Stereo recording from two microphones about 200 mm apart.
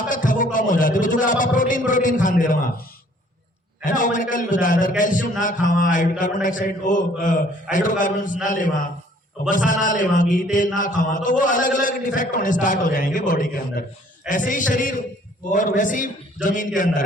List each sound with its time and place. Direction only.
0.1 s a man's voice: 40° left (ahead or behind)
3.8 s a man's voice: 40° left (ahead or behind)